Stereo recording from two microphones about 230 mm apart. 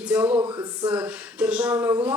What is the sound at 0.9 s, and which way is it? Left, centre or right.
Speech, centre.